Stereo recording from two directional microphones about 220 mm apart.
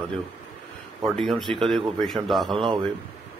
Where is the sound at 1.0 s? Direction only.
Centre (ahead or behind).